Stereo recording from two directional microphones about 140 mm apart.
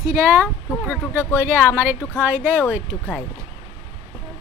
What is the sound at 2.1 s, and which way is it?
Speech, 15° right (ahead or behind).